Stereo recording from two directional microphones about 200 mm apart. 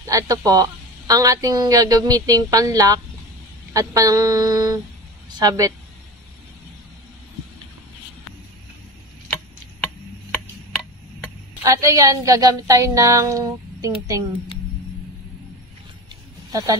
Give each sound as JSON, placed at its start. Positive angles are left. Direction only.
{"t": 0.0, "sound": "a woman's voice", "side_deg": -15}
{"t": 10.7, "sound": "tick", "side_deg": 0}
{"t": 11.6, "sound": "a woman's voice", "side_deg": -15}
{"t": 16.1, "sound": "a sound", "side_deg": -20}